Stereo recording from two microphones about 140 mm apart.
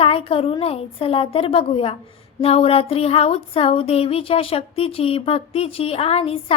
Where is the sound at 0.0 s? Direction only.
40° left (ahead or behind).